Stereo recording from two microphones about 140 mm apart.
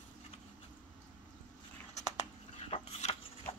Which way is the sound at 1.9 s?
55° left (ahead or behind).